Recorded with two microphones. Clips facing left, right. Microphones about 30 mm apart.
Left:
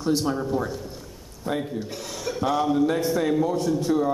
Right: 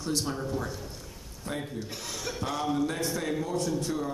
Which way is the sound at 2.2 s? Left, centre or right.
Centre.